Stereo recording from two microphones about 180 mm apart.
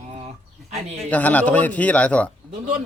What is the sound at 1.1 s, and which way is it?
Speech, 10° left (ahead or behind).